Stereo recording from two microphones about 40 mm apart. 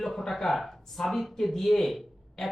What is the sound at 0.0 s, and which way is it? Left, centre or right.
Speech, centre.